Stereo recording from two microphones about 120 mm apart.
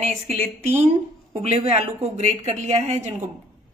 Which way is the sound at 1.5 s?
65° right (ahead or behind).